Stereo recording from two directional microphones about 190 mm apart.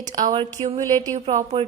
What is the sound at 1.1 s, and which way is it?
Speech, 35° right (ahead or behind).